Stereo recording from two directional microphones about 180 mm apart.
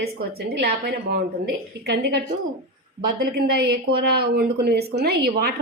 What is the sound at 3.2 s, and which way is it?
Speech, 65° right (ahead or behind).